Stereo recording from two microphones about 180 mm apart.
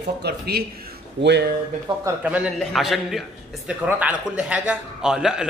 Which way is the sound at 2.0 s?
5° right (ahead or behind).